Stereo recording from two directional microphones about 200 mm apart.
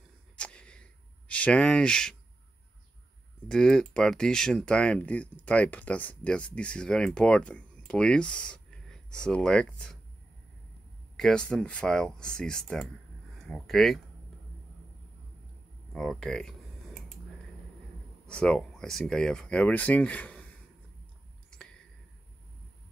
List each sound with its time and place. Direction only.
0.4 s a sound: 5° left (ahead or behind)
1.3 s speech: 5° left (ahead or behind)
3.4 s speech: 5° left (ahead or behind)
11.1 s speech: 5° left (ahead or behind)
15.9 s a sound: centre (ahead or behind)
18.2 s speech: 5° left (ahead or behind)